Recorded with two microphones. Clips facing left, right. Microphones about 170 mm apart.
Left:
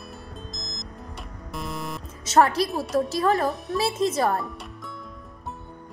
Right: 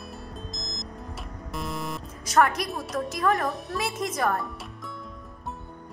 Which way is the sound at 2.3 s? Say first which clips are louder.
Left 3 dB; 30° left (ahead or behind).